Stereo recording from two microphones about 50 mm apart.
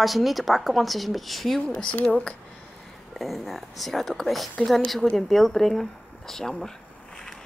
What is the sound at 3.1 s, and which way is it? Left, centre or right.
A woman's voice, centre.